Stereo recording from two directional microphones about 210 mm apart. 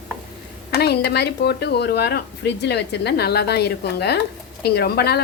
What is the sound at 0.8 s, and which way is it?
Speech, 50° left (ahead or behind).